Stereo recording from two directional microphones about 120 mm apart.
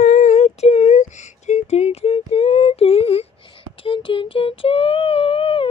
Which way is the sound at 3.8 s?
45° left (ahead or behind).